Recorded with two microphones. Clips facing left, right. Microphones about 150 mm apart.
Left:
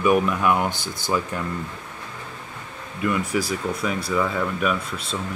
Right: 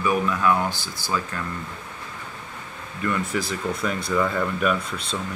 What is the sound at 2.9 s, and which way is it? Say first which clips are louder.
Speech: left 2 dB; 10° left (ahead or behind).